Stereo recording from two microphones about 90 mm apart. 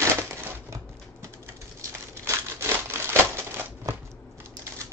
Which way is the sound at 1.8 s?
30° right (ahead or behind).